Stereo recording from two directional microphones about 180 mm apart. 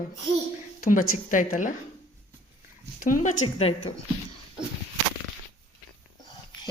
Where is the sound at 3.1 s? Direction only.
45° left (ahead or behind).